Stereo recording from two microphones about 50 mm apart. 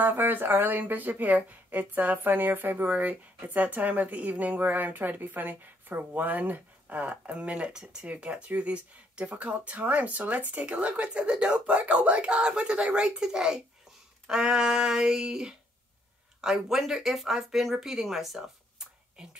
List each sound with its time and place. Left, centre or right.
0.0 s speech: right; by 18.9 s centre